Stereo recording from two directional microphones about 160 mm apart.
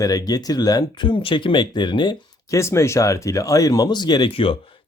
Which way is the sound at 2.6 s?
15° left (ahead or behind).